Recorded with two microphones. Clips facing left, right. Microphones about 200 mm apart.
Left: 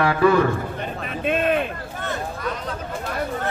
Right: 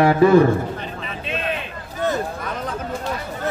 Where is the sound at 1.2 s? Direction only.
50° left (ahead or behind).